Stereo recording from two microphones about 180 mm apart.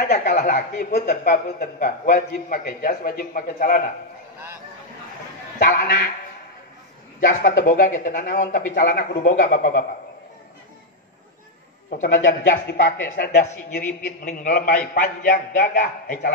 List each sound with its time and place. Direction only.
0.2 s speech: 45° left (ahead or behind)
5.6 s speech: 55° left (ahead or behind)
7.2 s speech: 55° left (ahead or behind)
12.2 s speech: 60° left (ahead or behind)
14.0 s speech: 50° left (ahead or behind)